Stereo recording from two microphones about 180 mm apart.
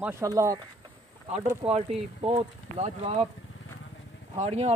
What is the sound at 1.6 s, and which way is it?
Speech, 35° right (ahead or behind).